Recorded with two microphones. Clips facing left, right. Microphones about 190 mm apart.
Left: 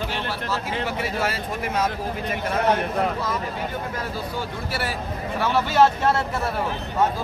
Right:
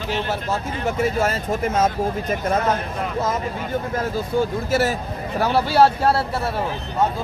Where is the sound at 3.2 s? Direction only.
45° right (ahead or behind).